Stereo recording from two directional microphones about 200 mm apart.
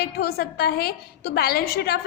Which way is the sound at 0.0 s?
50° left (ahead or behind).